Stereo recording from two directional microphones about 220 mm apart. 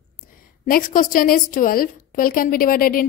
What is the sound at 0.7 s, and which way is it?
A woman's voice, 40° left (ahead or behind).